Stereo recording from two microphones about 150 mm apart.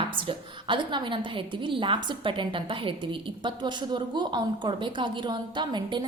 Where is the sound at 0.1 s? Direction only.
35° right (ahead or behind).